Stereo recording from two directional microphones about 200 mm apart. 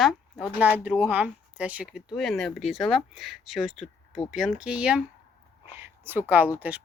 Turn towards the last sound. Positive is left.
turn(degrees=-10)  # may be behind; listen again after turning